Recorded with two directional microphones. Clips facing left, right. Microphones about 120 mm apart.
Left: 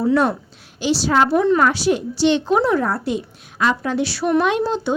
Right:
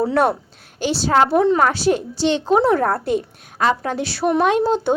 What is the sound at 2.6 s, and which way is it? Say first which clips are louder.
A woman's voice: right 2 dB; 50° right (ahead or behind).